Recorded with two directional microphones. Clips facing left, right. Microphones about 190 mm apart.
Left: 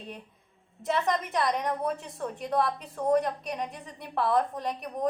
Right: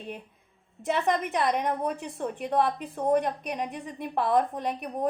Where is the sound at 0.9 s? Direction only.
20° right (ahead or behind).